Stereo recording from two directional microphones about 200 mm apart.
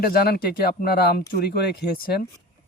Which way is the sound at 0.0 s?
50° left (ahead or behind).